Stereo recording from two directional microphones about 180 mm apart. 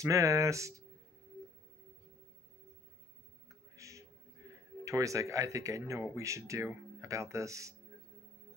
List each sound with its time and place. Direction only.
0.0 s speech: 20° right (ahead or behind)
3.7 s music: 15° right (ahead or behind)
4.4 s a sound: 20° right (ahead or behind)
4.8 s speech: 15° right (ahead or behind)